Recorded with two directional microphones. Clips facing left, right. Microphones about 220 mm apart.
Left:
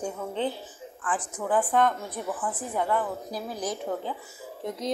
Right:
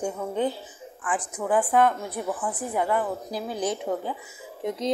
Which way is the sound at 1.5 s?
10° right (ahead or behind).